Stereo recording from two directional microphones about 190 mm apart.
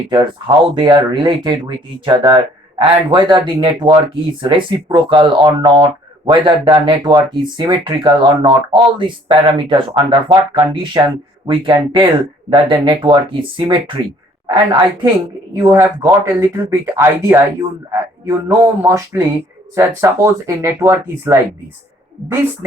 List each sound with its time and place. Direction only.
0.1 s speech: 25° right (ahead or behind)
15.5 s speech: 15° right (ahead or behind)